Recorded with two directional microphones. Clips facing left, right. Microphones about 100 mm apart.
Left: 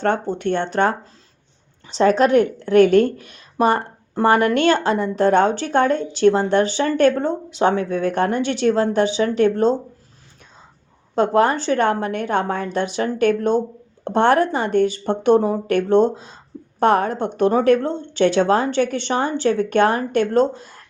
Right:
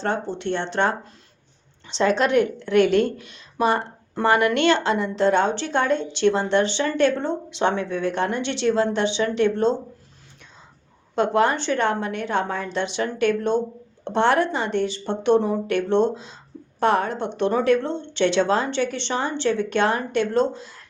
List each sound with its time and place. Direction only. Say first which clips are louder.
0.0 s a woman's voice: left 5 dB; 50° left (ahead or behind)
2.0 s a woman's voice: left 4 dB; 40° left (ahead or behind)
4.1 s a woman's voice: left 3 dB; 40° left (ahead or behind)
11.1 s a woman's voice: left 3 dB; 40° left (ahead or behind)